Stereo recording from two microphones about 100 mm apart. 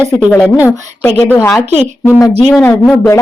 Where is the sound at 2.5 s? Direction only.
15° left (ahead or behind).